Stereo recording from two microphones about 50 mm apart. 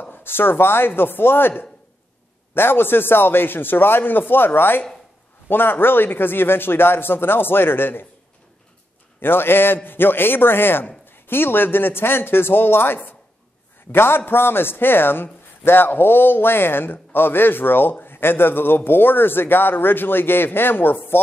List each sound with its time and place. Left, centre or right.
0.0 s speech: left
2.5 s speech: left
9.2 s speech: left